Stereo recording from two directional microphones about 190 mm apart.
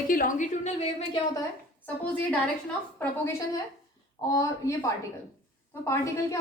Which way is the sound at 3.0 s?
15° left (ahead or behind).